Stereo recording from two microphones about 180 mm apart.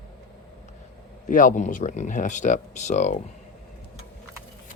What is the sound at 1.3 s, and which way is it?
Speech, 45° left (ahead or behind).